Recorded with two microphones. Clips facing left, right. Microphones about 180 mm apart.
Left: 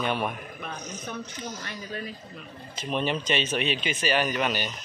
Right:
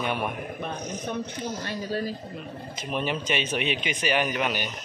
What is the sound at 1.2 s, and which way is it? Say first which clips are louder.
Speech: right 5 dB; 60° right (ahead or behind).